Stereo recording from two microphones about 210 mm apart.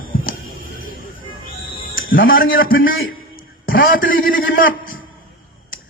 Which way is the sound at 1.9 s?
40° left (ahead or behind).